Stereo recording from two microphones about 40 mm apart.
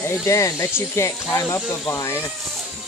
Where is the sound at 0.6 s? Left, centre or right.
Left.